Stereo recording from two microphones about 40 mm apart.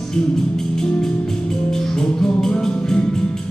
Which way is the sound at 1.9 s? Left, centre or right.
Centre.